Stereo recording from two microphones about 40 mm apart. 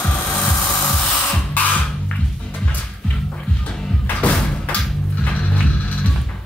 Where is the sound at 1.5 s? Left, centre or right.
Left.